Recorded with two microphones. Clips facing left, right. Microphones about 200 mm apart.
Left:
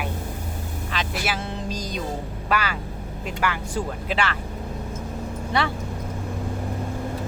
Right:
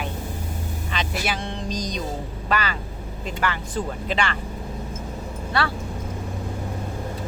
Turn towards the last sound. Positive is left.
turn(degrees=20)  # may be behind; listen again after turning